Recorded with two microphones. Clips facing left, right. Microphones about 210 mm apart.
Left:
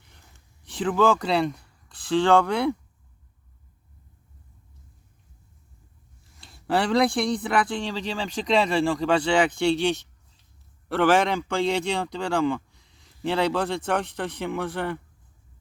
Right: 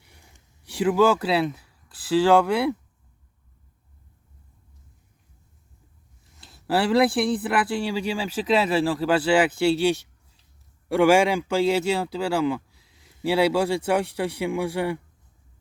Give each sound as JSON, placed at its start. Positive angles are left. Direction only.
{"t": 0.0, "sound": "speech", "side_deg": -10}
{"t": 6.4, "sound": "a man's voice", "side_deg": 0}